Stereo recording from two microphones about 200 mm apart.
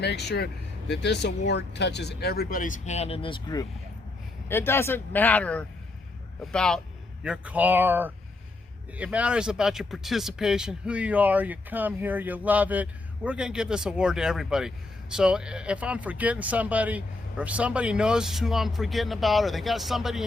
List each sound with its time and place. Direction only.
0.0 s speech: 55° left (ahead or behind); by 6.8 s 5° left (ahead or behind)
7.3 s speech: 5° right (ahead or behind)